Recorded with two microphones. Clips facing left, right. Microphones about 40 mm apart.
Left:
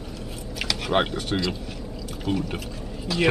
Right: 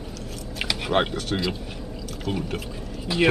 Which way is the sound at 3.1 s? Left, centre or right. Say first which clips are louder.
Right 2 dB; centre.